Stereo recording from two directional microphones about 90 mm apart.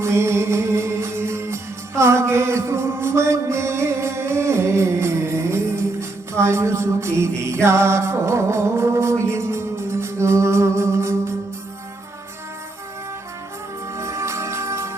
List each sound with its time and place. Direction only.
0.0 s music: 30° right (ahead or behind)
13.9 s music: 30° right (ahead or behind)